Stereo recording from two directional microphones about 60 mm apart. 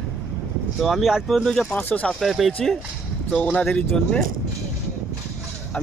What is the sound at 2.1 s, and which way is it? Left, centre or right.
Speech, centre.